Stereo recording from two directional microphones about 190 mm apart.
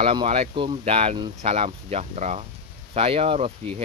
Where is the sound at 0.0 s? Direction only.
30° right (ahead or behind).